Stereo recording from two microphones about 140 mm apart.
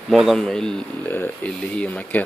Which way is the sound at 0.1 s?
Centre (ahead or behind).